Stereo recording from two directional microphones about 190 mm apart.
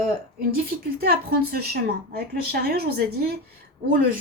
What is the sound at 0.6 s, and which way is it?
A woman's voice, 55° right (ahead or behind).